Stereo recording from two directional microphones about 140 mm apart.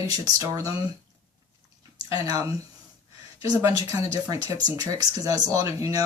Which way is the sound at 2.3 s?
25° right (ahead or behind).